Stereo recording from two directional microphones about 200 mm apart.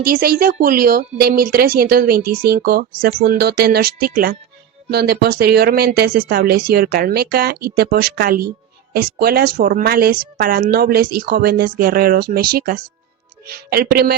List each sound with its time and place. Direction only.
0.0 s speech: 45° right (ahead or behind)